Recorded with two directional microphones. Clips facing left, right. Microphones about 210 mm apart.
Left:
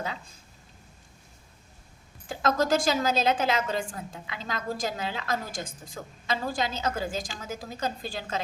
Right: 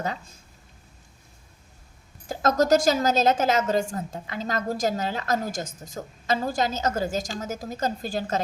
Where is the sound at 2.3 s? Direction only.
45° right (ahead or behind).